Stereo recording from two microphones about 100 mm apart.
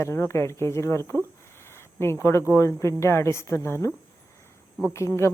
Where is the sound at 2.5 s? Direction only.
30° left (ahead or behind).